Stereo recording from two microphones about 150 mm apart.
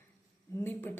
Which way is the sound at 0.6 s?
15° left (ahead or behind).